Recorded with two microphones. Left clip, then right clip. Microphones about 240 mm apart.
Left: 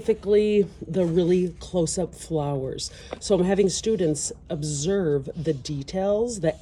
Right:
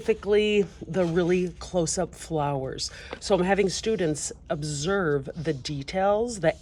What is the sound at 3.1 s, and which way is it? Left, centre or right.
Speech, centre.